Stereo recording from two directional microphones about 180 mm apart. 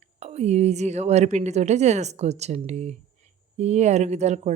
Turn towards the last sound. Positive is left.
turn(degrees=-40)  # may be behind; listen again after turning